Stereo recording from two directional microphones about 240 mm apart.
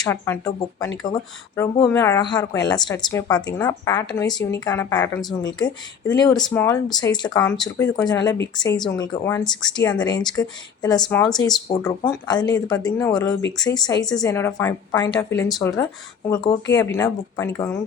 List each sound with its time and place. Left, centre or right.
0.0 s speech: centre
7.4 s speech: centre
7.8 s speech: centre
11.0 s speech: centre
11.7 s speech: centre